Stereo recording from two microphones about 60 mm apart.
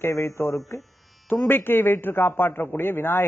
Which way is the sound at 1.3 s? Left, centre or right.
Left.